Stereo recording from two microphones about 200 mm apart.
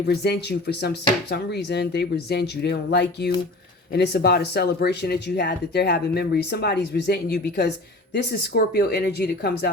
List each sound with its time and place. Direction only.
0.1 s speech: 55° left (ahead or behind)